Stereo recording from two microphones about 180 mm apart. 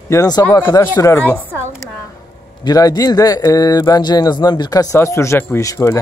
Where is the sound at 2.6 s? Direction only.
20° left (ahead or behind).